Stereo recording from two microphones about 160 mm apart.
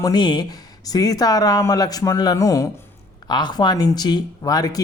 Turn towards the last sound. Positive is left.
turn(degrees=25)  # may be behind; listen again after turning